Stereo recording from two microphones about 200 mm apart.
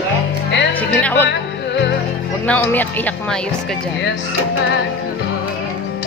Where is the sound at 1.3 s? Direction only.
60° left (ahead or behind).